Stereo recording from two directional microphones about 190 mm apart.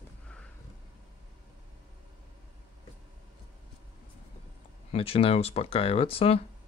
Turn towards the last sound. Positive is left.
turn(degrees=30)  # may be behind; listen again after turning